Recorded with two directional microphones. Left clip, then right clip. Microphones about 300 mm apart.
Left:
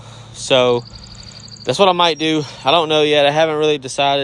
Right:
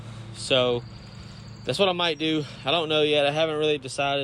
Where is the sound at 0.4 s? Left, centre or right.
Centre.